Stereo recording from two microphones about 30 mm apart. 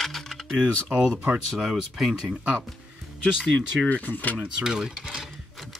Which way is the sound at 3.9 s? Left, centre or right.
Left.